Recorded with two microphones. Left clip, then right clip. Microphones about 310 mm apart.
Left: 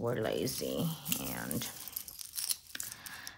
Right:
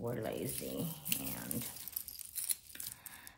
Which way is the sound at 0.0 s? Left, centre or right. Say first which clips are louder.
Left 6 dB; left.